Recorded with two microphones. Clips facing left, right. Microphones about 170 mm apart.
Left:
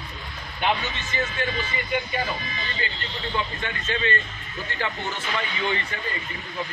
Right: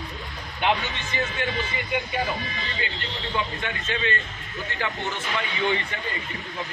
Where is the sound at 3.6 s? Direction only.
15° right (ahead or behind).